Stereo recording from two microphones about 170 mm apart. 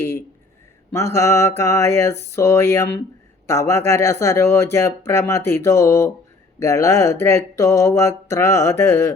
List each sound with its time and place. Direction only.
0.9 s speech: 15° left (ahead or behind)